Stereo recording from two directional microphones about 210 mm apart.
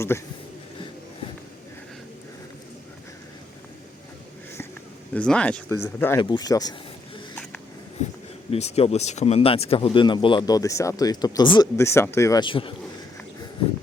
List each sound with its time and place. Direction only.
0.1 s speech: 10° left (ahead or behind)
5.1 s speech: 5° left (ahead or behind)
8.0 s speech: 35° left (ahead or behind)